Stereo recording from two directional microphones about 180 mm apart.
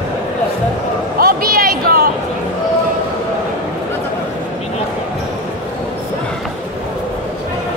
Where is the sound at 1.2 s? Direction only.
55° right (ahead or behind).